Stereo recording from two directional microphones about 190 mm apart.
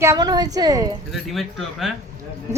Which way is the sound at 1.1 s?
Centre (ahead or behind).